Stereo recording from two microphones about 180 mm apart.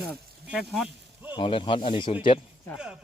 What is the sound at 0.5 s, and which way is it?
Speech, centre (ahead or behind).